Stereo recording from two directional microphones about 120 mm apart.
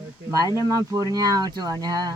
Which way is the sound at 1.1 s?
30° right (ahead or behind).